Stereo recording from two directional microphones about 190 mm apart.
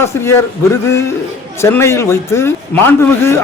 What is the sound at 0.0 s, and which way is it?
A man's voice, 15° left (ahead or behind).